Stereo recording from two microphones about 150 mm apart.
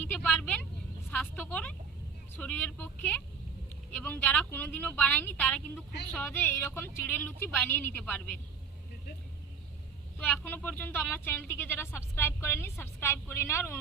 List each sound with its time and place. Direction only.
0.0 s vehicle: 10° left (ahead or behind)
1.1 s a sound: 10° left (ahead or behind)
2.3 s speech: 10° left (ahead or behind)
10.2 s speech: 10° left (ahead or behind)